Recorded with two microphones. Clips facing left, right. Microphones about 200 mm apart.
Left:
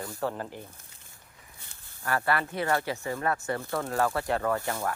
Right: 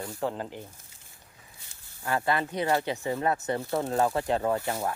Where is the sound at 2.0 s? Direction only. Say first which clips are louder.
Right 1 dB; 15° right (ahead or behind).